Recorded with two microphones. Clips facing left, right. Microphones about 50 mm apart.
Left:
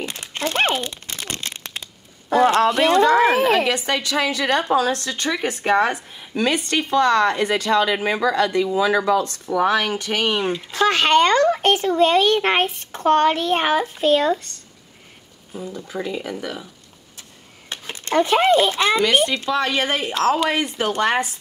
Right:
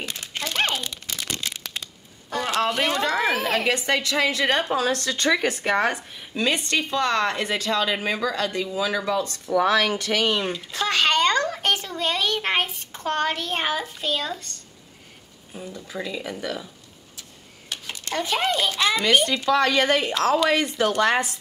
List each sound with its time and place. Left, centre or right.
0.0 s crumpling: left
2.3 s a woman's voice: left
5.6 s speech: left
9.1 s speech: left
9.9 s speech: left
15.9 s speech: left
16.3 s speech: left
17.6 s a child's voice: left